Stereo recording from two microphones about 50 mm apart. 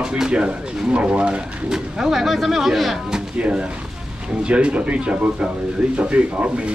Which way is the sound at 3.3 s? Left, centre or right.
Right.